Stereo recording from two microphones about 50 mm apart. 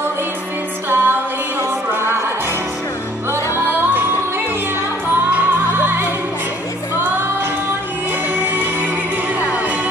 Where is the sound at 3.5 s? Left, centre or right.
Right.